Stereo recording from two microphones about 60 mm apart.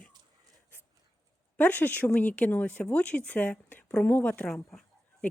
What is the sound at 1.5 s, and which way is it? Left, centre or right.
Speech, left.